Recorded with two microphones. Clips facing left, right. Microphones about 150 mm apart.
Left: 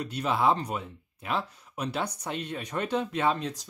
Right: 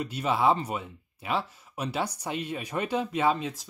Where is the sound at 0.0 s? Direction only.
5° right (ahead or behind).